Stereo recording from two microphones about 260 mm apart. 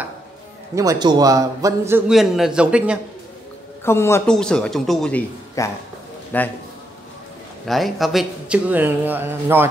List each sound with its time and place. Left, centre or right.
0.7 s a man's voice: centre
3.8 s a man's voice: centre
7.6 s a man's voice: centre